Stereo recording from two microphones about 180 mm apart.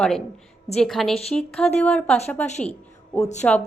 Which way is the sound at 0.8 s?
Centre (ahead or behind).